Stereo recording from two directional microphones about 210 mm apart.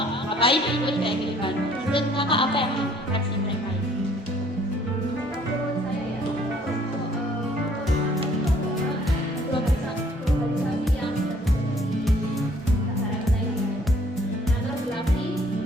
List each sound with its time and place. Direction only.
0.3 s speech: 25° left (ahead or behind)